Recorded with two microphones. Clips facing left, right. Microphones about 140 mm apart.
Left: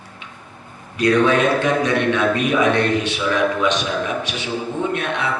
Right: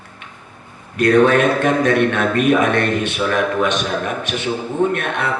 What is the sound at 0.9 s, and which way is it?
A man's voice, 50° right (ahead or behind).